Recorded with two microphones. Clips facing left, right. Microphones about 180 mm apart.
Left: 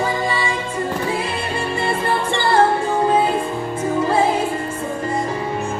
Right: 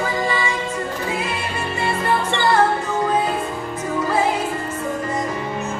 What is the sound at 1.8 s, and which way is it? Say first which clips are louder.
Music: right 1 dB; 30° left (ahead or behind).